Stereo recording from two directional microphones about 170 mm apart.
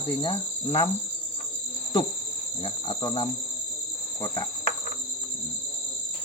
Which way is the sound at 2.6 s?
25° left (ahead or behind).